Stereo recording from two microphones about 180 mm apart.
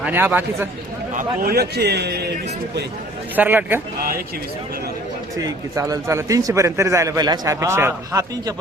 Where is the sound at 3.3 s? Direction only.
10° right (ahead or behind).